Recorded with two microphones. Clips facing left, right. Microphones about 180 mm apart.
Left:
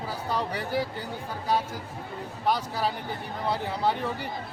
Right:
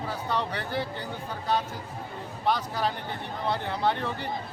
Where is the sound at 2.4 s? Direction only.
10° left (ahead or behind).